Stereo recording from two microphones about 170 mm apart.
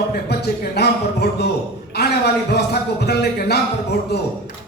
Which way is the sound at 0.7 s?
70° left (ahead or behind).